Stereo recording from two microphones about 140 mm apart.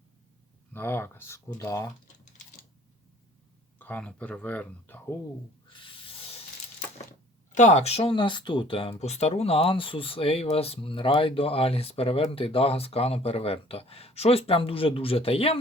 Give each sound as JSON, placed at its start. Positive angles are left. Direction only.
{"t": 0.7, "sound": "speech", "side_deg": 15}
{"t": 3.8, "sound": "speech", "side_deg": 10}
{"t": 5.7, "sound": "a sound", "side_deg": 40}
{"t": 7.5, "sound": "speech", "side_deg": 55}